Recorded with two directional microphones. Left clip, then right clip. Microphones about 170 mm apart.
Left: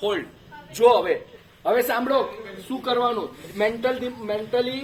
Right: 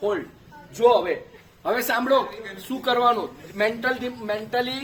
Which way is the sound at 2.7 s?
35° right (ahead or behind).